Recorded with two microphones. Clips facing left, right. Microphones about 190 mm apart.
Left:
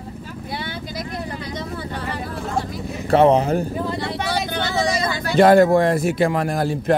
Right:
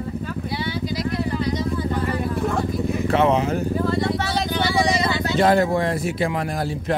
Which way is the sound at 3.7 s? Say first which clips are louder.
Right 4 dB; 15° left (ahead or behind).